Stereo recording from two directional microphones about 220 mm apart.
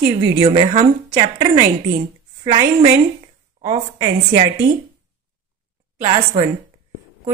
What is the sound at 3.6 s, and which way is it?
Speech, 25° right (ahead or behind).